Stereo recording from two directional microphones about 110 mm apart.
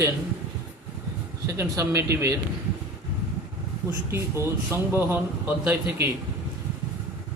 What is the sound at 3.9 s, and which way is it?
A man's voice, 20° right (ahead or behind).